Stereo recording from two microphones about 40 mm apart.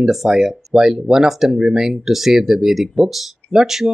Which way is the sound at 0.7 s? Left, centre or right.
Centre.